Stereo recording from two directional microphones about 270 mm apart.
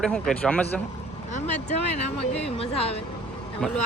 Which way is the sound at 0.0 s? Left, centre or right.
Centre.